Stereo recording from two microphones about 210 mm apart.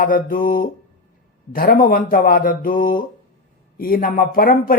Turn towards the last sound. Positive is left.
turn(degrees=45)  # may be behind; listen again after turning